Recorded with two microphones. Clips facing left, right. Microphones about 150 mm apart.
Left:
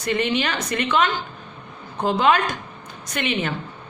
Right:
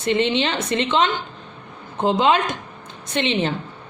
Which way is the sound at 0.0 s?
25° right (ahead or behind).